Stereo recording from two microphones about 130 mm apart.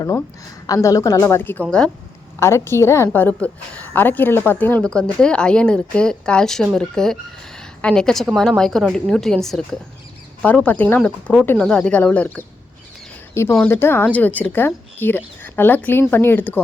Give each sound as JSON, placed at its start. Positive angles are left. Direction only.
{"t": 0.7, "sound": "a woman's voice", "side_deg": 25}
{"t": 13.7, "sound": "a woman's voice", "side_deg": 20}